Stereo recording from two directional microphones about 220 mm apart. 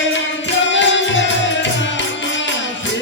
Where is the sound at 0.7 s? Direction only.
55° left (ahead or behind).